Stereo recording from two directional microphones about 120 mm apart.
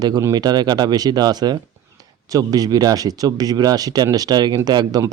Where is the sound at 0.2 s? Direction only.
30° right (ahead or behind).